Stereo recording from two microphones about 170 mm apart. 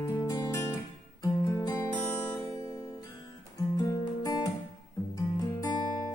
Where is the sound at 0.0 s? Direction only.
20° left (ahead or behind).